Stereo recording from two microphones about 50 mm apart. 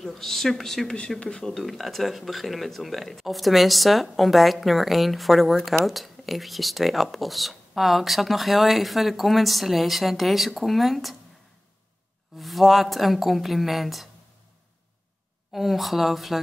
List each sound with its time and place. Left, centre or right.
0.0 s speech: centre
0.8 s speech: centre
12.4 s speech: centre
15.5 s speech: centre